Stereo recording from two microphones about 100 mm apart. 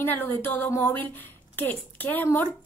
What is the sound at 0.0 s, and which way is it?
A woman's voice, 20° left (ahead or behind).